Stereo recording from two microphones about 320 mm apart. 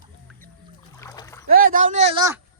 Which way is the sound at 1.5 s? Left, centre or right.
Right.